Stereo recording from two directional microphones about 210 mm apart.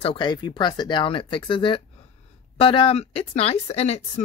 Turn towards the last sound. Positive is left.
turn(degrees=30)  # may be behind; listen again after turning